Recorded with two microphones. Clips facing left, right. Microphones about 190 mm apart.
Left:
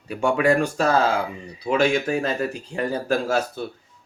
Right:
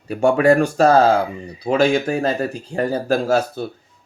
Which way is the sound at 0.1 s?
40° right (ahead or behind).